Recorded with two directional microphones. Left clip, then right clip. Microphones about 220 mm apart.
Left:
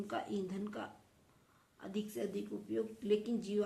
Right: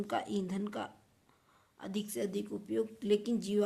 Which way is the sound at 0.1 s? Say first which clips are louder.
Right 4 dB; 50° right (ahead or behind).